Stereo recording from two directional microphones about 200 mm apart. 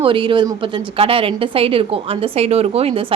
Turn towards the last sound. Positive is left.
turn(degrees=-30)  # may be behind; listen again after turning